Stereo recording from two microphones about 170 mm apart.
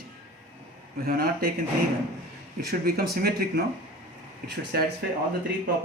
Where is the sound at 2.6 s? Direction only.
65° right (ahead or behind).